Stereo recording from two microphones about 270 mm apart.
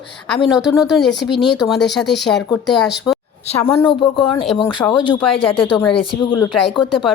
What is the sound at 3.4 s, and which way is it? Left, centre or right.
Speech, centre.